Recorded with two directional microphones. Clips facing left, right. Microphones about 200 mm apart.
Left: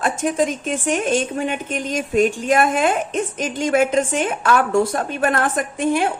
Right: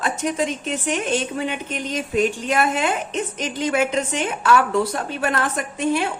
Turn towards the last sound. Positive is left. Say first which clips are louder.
# left 3 dB
turn(degrees=50)  # may be behind; listen again after turning